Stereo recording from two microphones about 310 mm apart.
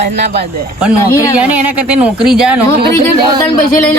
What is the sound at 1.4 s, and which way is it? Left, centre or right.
Speech, centre.